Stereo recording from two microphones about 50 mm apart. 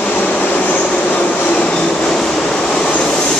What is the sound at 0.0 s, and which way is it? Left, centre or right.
Vehicle, left.